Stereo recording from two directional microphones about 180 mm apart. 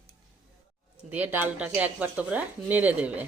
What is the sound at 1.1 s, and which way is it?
Speech, 10° right (ahead or behind).